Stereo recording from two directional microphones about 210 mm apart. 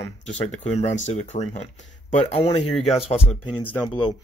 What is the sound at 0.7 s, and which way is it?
Speech, 30° left (ahead or behind).